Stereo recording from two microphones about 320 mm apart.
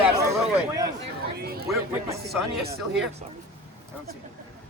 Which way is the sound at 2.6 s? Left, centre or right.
Right.